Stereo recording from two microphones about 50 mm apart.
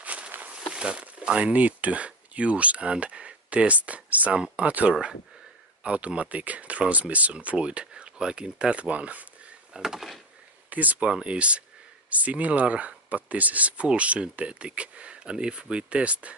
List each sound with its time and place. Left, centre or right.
0.0 s walk: right
0.7 s a sound: right
1.5 s speech: right
9.8 s door: centre
10.7 s speech: right
11.1 s speech: right